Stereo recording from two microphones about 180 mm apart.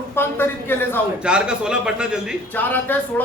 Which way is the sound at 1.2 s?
5° right (ahead or behind).